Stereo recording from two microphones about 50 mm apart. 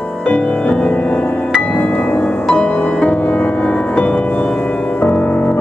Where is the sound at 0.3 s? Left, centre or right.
Left.